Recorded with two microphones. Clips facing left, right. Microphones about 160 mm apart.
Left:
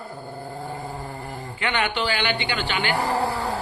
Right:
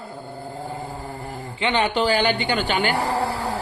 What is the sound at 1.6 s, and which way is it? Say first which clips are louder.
A woman's voice: right 4 dB; 30° right (ahead or behind).